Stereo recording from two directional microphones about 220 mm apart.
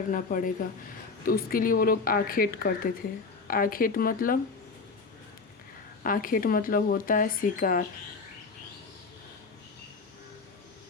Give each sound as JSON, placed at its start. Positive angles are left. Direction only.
{"t": 0.1, "sound": "speech", "side_deg": 40}
{"t": 6.0, "sound": "speech", "side_deg": 40}